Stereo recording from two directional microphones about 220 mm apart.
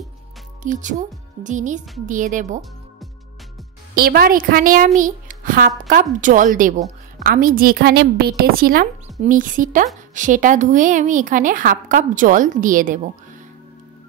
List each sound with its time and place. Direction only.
0.7 s a woman's voice: 35° right (ahead or behind)
3.9 s a woman's voice: 45° right (ahead or behind)